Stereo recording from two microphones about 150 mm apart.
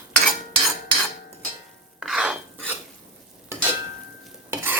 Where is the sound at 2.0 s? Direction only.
5° right (ahead or behind).